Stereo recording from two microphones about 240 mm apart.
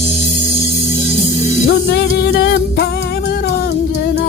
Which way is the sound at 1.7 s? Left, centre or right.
Left.